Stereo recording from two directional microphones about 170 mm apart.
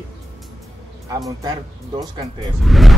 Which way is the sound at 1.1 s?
20° right (ahead or behind).